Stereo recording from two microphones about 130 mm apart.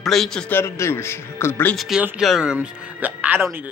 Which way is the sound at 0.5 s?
20° left (ahead or behind).